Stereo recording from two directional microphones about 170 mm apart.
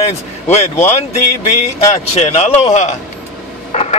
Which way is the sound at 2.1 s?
40° left (ahead or behind).